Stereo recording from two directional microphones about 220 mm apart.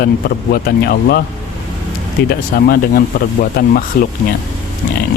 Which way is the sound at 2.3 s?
40° left (ahead or behind).